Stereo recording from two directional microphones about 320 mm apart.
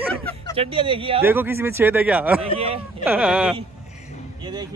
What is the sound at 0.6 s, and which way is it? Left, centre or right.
Speech, centre.